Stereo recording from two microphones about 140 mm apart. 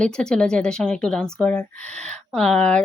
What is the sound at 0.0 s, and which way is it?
A woman's voice, 5° left (ahead or behind).